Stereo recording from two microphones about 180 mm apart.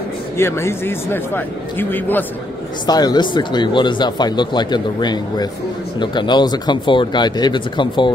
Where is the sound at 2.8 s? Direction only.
20° left (ahead or behind).